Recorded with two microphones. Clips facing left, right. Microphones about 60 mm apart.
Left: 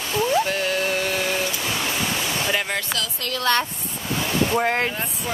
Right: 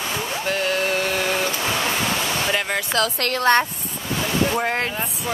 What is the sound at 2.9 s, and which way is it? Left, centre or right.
Speech, right.